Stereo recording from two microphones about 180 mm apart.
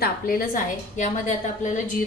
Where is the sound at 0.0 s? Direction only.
50° left (ahead or behind).